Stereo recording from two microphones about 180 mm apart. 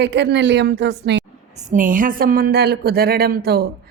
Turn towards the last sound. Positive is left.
turn(degrees=-60)  # may be behind; listen again after turning